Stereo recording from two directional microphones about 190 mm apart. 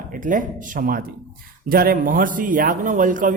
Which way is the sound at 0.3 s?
45° right (ahead or behind).